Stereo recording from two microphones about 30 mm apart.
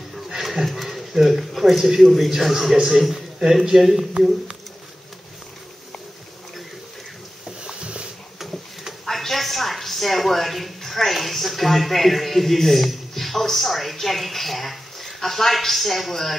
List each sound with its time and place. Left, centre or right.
0.4 s a sound: centre
0.7 s speech: centre
1.6 s a man's voice: centre
7.6 s boat: right
9.0 s speech: centre